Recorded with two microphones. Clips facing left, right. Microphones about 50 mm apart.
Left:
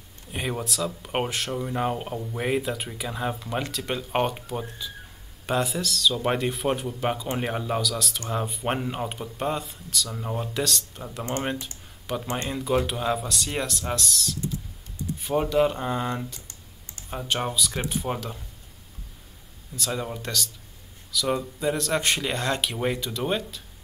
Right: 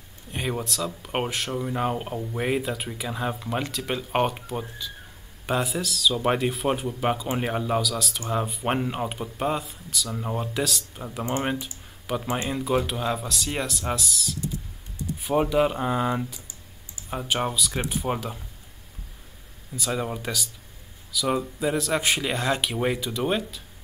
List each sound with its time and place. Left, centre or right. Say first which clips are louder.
0.3 s speech: right 1 dB; centre
16.4 s computer keyboard: even; left
17.1 s speech: right 1 dB; centre
19.7 s speech: right 2 dB; centre